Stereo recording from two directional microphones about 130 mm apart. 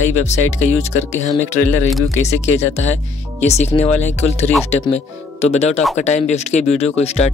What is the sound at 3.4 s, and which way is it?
Speech, 55° left (ahead or behind).